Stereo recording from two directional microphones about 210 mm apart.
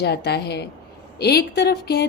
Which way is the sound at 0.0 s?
50° left (ahead or behind).